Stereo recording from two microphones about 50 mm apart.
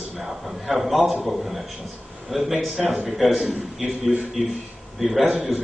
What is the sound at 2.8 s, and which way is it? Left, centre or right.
Speech, right.